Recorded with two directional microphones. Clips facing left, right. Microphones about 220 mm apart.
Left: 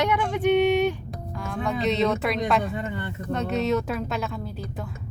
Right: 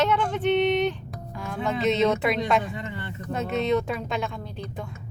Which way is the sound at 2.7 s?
40° left (ahead or behind).